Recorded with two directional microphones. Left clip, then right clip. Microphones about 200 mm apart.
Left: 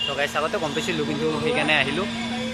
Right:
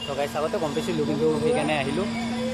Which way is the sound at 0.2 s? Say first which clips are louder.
Right 2 dB; centre (ahead or behind).